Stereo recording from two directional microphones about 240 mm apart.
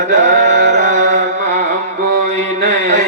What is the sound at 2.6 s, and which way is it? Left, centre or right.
Mantra, right.